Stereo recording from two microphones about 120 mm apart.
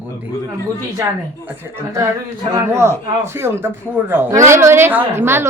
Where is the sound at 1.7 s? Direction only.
25° right (ahead or behind).